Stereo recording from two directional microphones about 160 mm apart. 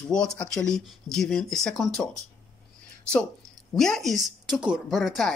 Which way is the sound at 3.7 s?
5° left (ahead or behind).